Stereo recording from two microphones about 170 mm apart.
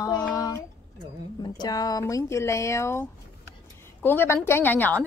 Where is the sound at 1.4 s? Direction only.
25° left (ahead or behind).